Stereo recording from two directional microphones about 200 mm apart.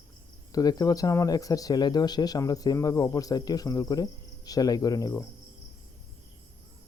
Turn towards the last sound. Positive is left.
turn(degrees=15)  # may be behind; listen again after turning